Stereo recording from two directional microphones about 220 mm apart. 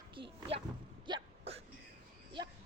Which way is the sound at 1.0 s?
25° right (ahead or behind).